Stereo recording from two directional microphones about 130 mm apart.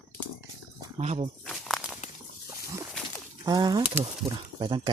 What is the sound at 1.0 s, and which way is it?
Speech, 55° right (ahead or behind).